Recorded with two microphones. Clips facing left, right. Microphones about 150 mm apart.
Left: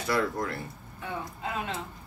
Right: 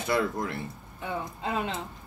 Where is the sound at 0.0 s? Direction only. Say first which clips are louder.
Right 1 dB; 20° right (ahead or behind).